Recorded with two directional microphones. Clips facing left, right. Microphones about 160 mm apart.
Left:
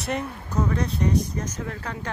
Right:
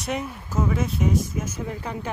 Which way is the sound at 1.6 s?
15° right (ahead or behind).